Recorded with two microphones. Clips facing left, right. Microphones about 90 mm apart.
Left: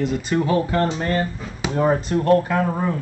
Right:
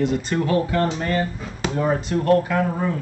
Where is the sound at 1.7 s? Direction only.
35° left (ahead or behind).